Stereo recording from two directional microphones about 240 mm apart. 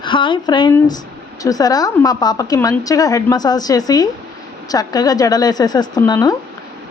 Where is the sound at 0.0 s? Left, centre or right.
Centre.